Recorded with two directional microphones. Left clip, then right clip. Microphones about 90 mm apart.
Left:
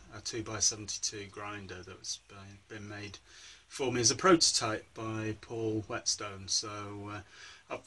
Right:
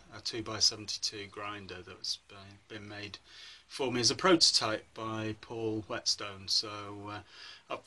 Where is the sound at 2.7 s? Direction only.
25° right (ahead or behind).